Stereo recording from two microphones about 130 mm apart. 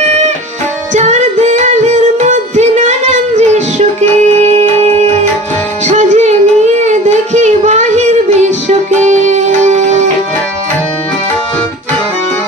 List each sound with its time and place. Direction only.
0.9 s music: 65° right (ahead or behind)